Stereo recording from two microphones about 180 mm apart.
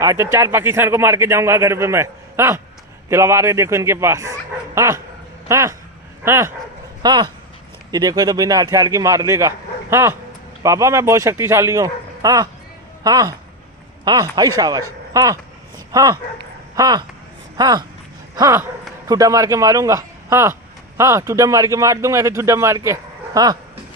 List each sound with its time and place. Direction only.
0.0 s a man's voice: 15° right (ahead or behind)
14.6 s a man's voice: 20° right (ahead or behind)